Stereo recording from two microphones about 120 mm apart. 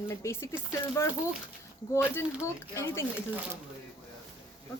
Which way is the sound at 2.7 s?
25° left (ahead or behind).